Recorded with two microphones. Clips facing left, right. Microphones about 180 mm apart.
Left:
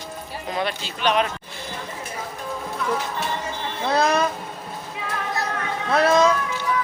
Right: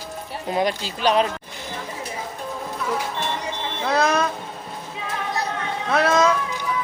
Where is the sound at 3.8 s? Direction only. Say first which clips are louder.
Even; centre (ahead or behind).